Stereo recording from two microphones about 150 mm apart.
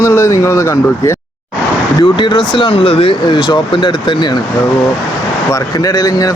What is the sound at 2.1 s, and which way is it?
Speech, 30° left (ahead or behind).